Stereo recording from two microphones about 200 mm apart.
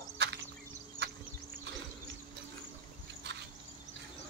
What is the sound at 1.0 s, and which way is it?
Insect, 60° right (ahead or behind).